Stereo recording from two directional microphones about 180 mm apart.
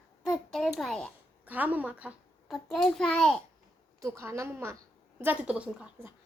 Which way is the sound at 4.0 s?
15° right (ahead or behind).